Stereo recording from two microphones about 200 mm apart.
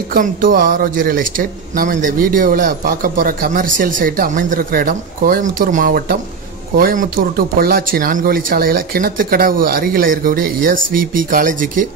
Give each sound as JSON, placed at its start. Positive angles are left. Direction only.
{"t": 0.1, "sound": "speech", "side_deg": -45}